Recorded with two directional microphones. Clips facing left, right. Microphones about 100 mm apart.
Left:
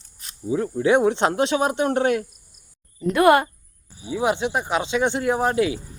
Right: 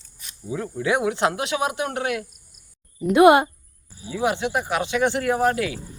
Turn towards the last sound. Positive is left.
turn(degrees=20)  # may be behind; listen again after turning